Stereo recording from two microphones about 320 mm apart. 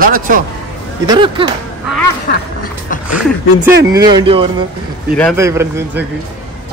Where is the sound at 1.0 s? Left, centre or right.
Centre.